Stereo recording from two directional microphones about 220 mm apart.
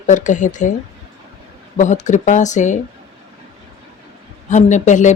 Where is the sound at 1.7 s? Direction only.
35° left (ahead or behind).